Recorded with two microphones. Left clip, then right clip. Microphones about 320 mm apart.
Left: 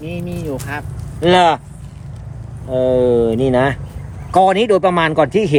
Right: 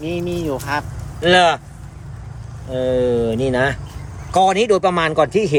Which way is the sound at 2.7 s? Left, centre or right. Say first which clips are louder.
Left 4 dB; centre.